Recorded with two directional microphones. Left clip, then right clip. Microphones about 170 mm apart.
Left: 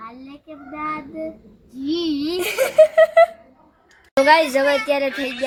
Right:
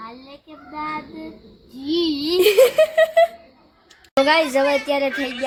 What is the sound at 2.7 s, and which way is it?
Speech, 5° right (ahead or behind).